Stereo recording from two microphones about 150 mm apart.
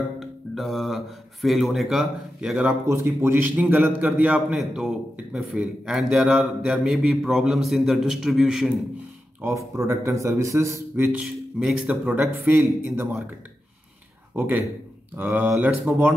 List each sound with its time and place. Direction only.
0.2 s speech: centre (ahead or behind)
2.9 s a man's voice: 15° right (ahead or behind)
9.6 s speech: 20° right (ahead or behind)
11.1 s speech: 5° right (ahead or behind)
14.3 s speech: 15° right (ahead or behind)